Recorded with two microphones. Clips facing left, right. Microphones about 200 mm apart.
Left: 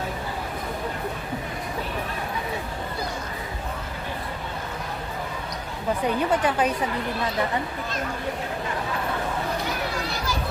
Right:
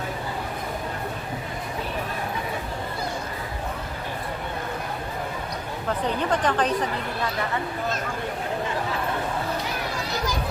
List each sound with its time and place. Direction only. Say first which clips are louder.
6.3 s a woman's voice: right 2 dB; 10° left (ahead or behind)